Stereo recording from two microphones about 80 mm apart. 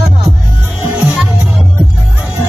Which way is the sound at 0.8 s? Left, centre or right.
Right.